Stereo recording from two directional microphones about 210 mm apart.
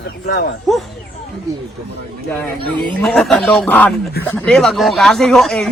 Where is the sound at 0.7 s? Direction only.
Centre (ahead or behind).